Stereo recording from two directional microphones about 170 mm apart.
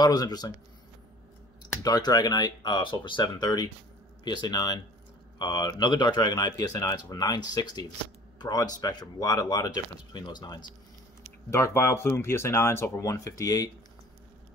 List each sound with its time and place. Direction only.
0.0 s speech: 25° left (ahead or behind)
1.6 s speech: 25° left (ahead or behind)